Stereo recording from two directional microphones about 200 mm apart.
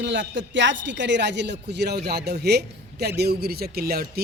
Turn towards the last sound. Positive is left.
turn(degrees=-50)  # may be behind; listen again after turning